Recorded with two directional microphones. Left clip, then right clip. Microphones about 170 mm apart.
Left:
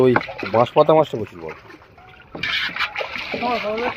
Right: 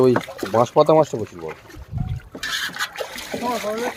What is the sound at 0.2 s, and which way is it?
Speech, 20° right (ahead or behind).